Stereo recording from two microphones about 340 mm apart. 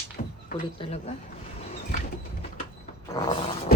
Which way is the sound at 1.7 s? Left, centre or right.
Centre.